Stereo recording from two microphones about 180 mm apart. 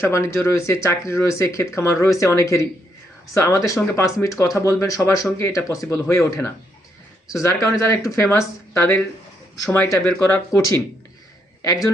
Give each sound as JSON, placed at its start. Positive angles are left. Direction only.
{"t": 0.0, "sound": "speech", "side_deg": 15}